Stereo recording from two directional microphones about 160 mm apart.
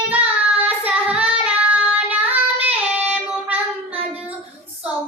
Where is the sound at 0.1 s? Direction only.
10° right (ahead or behind).